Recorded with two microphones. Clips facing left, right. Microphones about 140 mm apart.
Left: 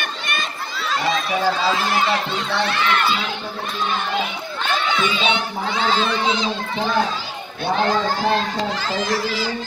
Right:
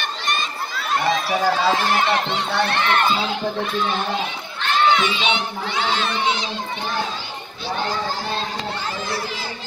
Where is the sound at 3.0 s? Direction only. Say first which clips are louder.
Right 2 dB; 30° right (ahead or behind).